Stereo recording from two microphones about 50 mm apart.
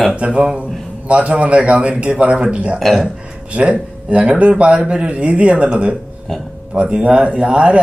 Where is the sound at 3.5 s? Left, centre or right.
Right.